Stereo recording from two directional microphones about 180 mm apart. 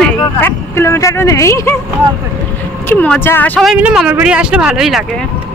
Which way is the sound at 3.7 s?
5° right (ahead or behind).